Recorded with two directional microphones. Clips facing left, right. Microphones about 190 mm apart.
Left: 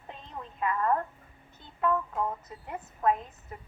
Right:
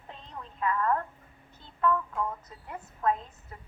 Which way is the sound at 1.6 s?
20° left (ahead or behind).